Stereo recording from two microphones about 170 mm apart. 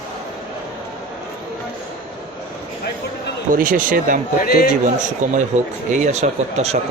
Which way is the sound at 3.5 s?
55° right (ahead or behind).